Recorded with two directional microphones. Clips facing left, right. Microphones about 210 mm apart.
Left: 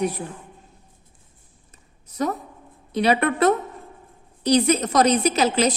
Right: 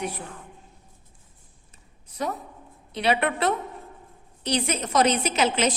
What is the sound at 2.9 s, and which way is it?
A woman's voice, 40° left (ahead or behind).